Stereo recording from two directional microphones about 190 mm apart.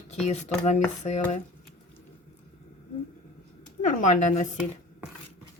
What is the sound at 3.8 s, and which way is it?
Speech, 40° left (ahead or behind).